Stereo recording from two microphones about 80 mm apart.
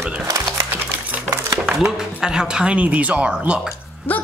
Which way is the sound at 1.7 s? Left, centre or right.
Centre.